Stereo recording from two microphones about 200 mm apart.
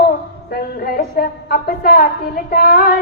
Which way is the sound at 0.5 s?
45° left (ahead or behind).